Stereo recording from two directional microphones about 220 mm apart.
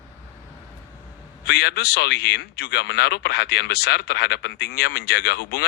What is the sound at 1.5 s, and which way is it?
Speech, 50° left (ahead or behind).